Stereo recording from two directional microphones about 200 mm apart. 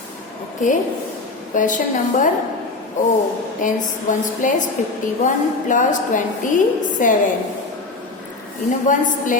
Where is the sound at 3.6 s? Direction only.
40° left (ahead or behind).